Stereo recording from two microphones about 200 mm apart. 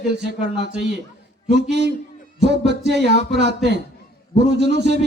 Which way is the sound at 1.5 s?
60° right (ahead or behind).